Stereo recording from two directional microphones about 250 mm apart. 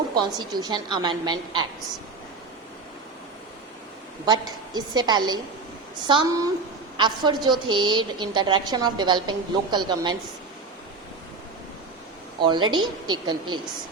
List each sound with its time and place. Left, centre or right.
0.1 s a woman's voice: centre
4.3 s a woman's voice: centre
12.4 s a woman's voice: centre